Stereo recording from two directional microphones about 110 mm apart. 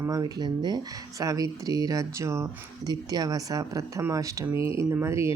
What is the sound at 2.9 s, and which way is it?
Speech, 35° right (ahead or behind).